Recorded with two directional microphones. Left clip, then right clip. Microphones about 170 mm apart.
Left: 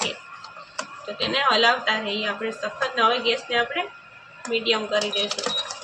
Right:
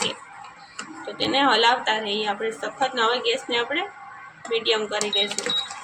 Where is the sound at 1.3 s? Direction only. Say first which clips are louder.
Right 1 dB; 20° right (ahead or behind).